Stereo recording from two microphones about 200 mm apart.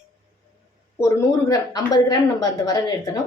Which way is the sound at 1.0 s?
15° left (ahead or behind).